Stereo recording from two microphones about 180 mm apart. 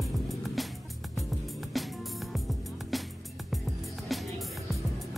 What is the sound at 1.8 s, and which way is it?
Music, centre (ahead or behind).